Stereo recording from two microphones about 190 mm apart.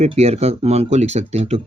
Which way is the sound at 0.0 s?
35° right (ahead or behind).